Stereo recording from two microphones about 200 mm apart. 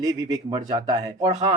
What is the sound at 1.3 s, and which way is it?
Speech, 35° right (ahead or behind).